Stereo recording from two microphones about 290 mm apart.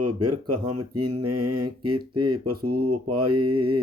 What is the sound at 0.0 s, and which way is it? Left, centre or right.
Mantra, right.